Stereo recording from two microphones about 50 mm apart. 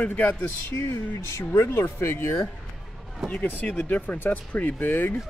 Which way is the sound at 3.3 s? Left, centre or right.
Left.